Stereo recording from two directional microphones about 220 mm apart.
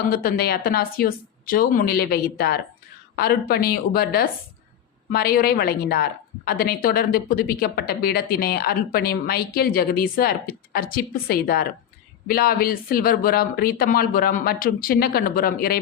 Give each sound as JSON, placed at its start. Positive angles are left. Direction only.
{"t": 0.1, "sound": "a woman's voice", "side_deg": 40}